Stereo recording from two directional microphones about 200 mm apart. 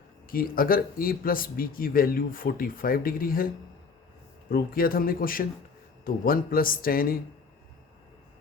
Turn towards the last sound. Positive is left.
turn(degrees=45)  # may be behind; listen again after turning